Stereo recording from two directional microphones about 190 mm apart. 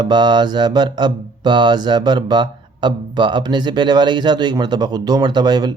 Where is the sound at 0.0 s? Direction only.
20° right (ahead or behind).